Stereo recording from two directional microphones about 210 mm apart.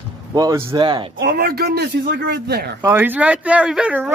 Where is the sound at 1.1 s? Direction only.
50° right (ahead or behind).